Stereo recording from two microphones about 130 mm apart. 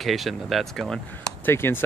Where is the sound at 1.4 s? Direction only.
15° left (ahead or behind).